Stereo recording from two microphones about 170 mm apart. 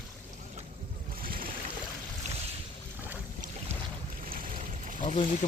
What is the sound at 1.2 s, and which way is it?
Boat, 60° right (ahead or behind).